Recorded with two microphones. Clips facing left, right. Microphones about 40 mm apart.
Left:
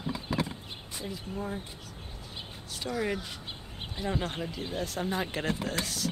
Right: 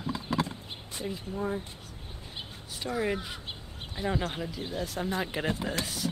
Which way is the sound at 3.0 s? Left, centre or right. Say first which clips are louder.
Right 2 dB; centre.